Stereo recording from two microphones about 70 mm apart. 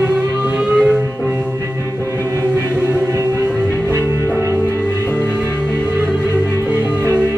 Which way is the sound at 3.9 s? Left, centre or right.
Right.